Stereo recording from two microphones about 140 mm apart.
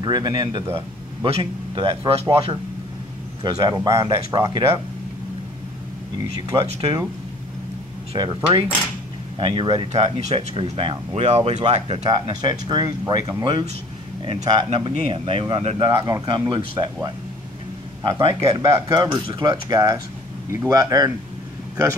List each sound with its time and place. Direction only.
0.0 s speech: 30° right (ahead or behind)
6.5 s speech: 20° right (ahead or behind)
8.2 s speech: 30° right (ahead or behind)
9.5 s speech: 30° right (ahead or behind)
9.9 s speech: 45° right (ahead or behind)
14.7 s speech: 45° right (ahead or behind)
15.9 s speech: 25° right (ahead or behind)
18.0 s speech: 20° right (ahead or behind)
19.2 s speech: 35° right (ahead or behind)
19.5 s speech: 25° right (ahead or behind)